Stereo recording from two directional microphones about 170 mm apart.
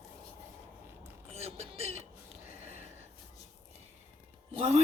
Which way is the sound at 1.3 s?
35° right (ahead or behind).